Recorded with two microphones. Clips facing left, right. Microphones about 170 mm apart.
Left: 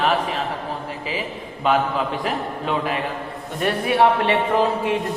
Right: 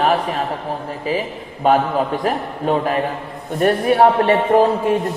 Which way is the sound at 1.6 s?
45° right (ahead or behind).